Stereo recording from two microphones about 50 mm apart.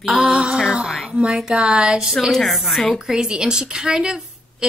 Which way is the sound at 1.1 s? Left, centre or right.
Right.